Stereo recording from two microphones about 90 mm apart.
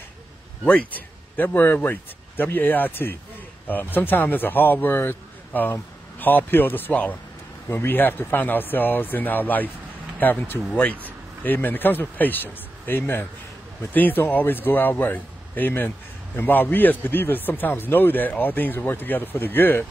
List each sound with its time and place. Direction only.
0.7 s speech: 15° left (ahead or behind)
10.7 s speech: 15° left (ahead or behind)